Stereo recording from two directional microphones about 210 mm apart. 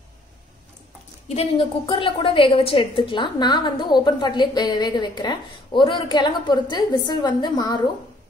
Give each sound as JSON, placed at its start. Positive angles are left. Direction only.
{"t": 1.3, "sound": "a woman's voice", "side_deg": 25}